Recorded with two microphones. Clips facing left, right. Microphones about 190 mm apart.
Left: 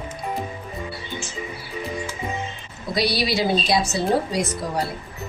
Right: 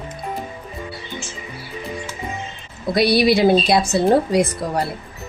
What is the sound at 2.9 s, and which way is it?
A woman's voice, 55° right (ahead or behind).